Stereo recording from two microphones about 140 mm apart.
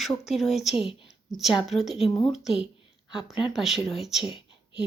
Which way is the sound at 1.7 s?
Centre (ahead or behind).